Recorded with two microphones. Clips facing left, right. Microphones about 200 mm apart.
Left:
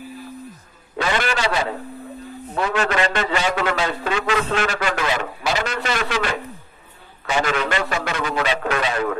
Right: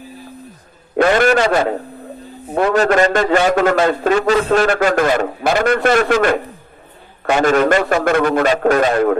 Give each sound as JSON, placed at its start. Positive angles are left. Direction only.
{"t": 0.9, "sound": "a man's voice", "side_deg": -50}
{"t": 4.5, "sound": "a man's voice", "side_deg": -50}